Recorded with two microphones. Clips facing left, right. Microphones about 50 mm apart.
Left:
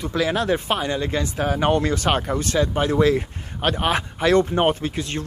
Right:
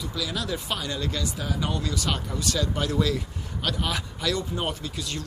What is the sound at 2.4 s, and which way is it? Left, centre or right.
Speech, left.